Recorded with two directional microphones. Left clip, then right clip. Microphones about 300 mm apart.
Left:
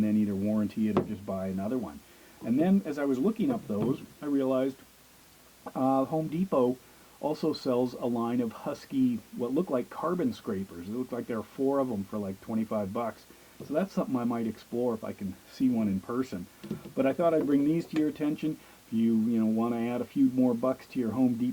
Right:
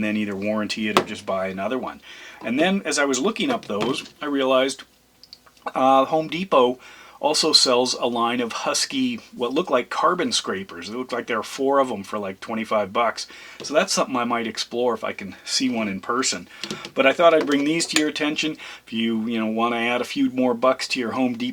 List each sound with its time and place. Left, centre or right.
0.0 s speech: centre
7.9 s speech: right
8.2 s speech: centre